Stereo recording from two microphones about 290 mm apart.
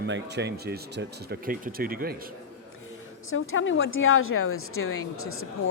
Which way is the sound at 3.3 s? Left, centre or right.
Left.